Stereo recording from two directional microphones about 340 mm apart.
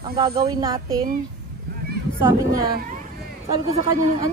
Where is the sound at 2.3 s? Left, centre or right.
Centre.